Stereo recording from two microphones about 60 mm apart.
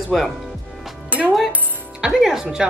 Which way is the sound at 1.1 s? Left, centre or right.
Right.